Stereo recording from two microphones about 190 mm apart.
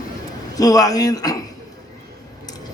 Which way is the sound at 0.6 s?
20° left (ahead or behind).